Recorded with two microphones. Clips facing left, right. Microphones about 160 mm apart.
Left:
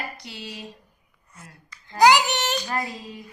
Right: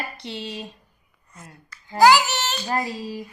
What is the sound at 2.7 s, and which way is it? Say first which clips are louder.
Speech: right 4 dB; 30° right (ahead or behind).